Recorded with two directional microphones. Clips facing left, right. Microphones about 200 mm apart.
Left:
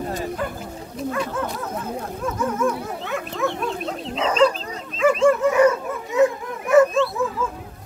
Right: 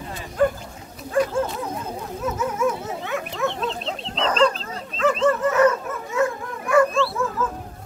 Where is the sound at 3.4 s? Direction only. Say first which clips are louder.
Left 1 dB; 20° right (ahead or behind).